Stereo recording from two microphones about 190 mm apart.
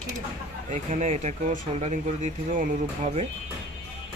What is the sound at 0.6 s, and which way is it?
Speech, 40° right (ahead or behind).